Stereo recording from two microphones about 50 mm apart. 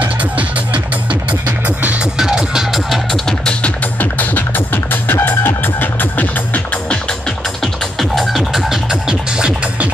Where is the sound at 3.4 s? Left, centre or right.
Centre.